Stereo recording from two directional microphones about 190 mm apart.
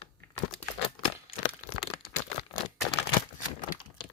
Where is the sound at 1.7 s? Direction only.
30° left (ahead or behind).